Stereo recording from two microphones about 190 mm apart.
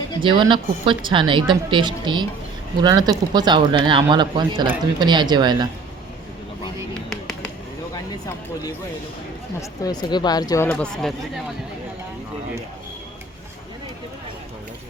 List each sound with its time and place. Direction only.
0.2 s speech: 25° right (ahead or behind)
9.6 s speech: 20° left (ahead or behind)